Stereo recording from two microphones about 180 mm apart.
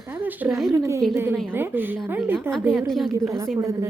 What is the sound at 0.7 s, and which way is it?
A woman's voice, 15° right (ahead or behind).